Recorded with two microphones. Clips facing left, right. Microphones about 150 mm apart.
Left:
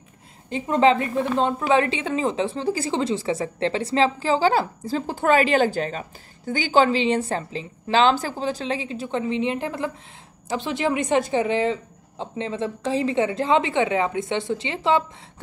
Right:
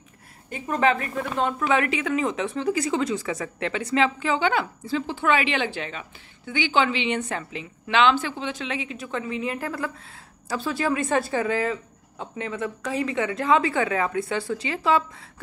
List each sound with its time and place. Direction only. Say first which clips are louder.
0.5 s a woman's voice: left 4 dB; 25° left (ahead or behind)